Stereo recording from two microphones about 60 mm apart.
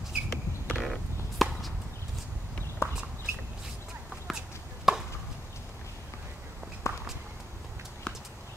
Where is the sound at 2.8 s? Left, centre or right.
Left.